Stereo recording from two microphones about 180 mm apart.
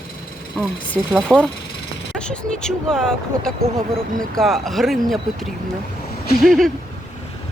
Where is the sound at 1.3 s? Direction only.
Centre (ahead or behind).